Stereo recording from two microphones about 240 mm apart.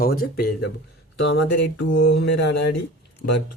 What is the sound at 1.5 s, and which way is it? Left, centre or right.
Speech, left.